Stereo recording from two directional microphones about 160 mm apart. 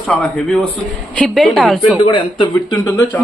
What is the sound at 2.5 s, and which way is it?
Speech, 20° left (ahead or behind).